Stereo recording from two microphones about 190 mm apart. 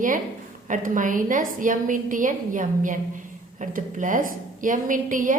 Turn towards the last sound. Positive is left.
turn(degrees=-45)  # may be behind; listen again after turning